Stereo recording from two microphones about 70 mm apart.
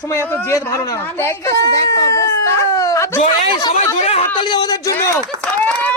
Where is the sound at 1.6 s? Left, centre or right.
Left.